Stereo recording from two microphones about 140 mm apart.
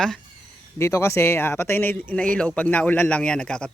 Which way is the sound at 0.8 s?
20° left (ahead or behind).